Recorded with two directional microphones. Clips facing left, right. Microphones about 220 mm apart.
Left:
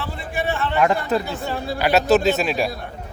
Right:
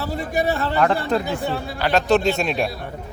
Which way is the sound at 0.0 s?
40° right (ahead or behind).